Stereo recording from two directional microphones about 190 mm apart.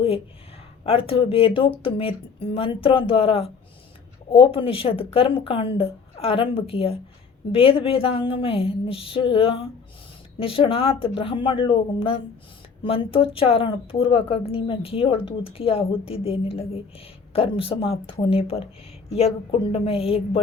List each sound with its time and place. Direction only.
0.9 s a woman's voice: 30° left (ahead or behind)